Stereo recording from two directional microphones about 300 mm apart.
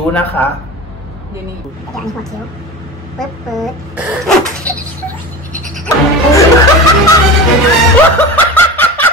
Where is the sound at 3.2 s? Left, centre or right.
Centre.